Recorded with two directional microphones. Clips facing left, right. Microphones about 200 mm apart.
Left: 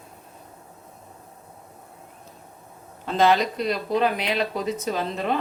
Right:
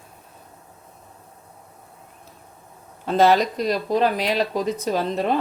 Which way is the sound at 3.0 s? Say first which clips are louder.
Right 3 dB; 45° right (ahead or behind).